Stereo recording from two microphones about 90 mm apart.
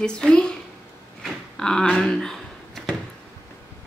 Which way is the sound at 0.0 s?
10° left (ahead or behind).